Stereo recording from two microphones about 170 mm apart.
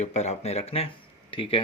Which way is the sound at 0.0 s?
40° left (ahead or behind).